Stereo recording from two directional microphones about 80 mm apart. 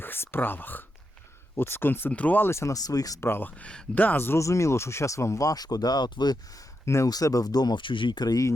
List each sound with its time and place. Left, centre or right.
0.0 s speech: left
2.5 s speech: left
2.7 s speech: left
3.2 s speech: left
3.6 s speech: centre
3.9 s speech: left
6.8 s speech: left